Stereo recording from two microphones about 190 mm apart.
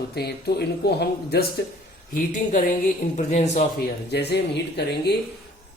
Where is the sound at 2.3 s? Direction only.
40° left (ahead or behind).